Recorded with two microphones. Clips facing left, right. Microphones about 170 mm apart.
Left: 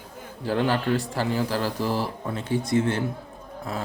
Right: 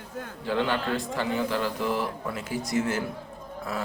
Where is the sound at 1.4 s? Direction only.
35° left (ahead or behind).